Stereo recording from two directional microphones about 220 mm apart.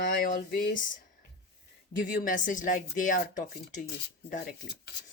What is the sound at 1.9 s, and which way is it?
Speech, 45° left (ahead or behind).